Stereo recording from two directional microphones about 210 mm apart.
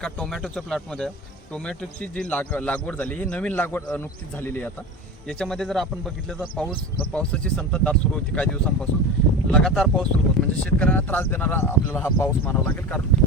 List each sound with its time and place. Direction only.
0.0 s speech: centre (ahead or behind)